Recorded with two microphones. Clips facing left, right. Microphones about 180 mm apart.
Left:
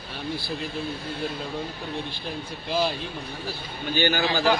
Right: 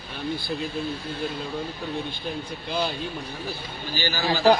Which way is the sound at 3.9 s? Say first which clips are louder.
Left 6 dB; 60° left (ahead or behind).